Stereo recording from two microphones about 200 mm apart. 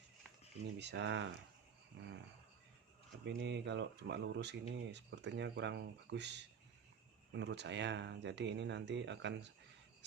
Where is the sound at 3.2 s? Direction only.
60° right (ahead or behind).